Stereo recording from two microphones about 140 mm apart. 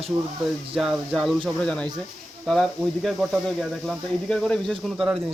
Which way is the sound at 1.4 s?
5° left (ahead or behind).